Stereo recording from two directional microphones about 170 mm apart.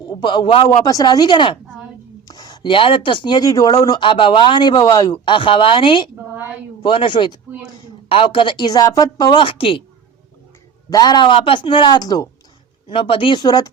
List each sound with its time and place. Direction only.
0.2 s speech: 30° left (ahead or behind)
10.8 s speech: 25° left (ahead or behind)
12.9 s speech: 35° left (ahead or behind)